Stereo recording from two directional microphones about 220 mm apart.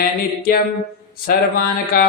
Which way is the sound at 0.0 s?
40° left (ahead or behind).